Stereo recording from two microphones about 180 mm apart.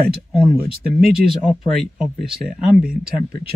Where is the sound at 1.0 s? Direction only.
Centre (ahead or behind).